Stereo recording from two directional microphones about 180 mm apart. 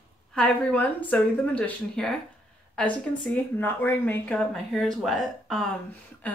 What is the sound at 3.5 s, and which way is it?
Speech, 10° left (ahead or behind).